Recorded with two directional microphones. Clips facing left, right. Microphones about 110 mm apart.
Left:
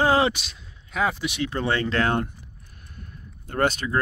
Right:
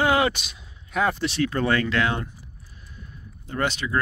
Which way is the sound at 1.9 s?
50° left (ahead or behind).